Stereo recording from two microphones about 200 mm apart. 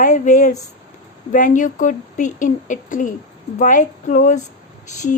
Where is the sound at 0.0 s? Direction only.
40° left (ahead or behind).